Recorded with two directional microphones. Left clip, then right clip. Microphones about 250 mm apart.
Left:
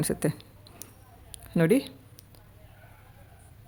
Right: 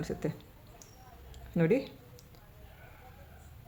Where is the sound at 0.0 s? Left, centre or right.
Left.